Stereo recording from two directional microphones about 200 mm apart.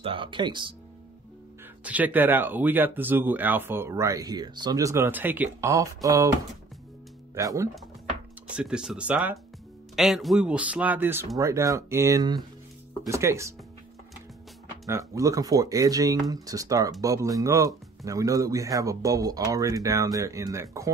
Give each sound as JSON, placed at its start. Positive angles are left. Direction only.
{"t": 0.0, "sound": "speech", "side_deg": -25}
{"t": 1.9, "sound": "speech", "side_deg": -10}
{"t": 7.3, "sound": "speech", "side_deg": -15}
{"t": 8.5, "sound": "speech", "side_deg": -5}
{"t": 14.9, "sound": "speech", "side_deg": -15}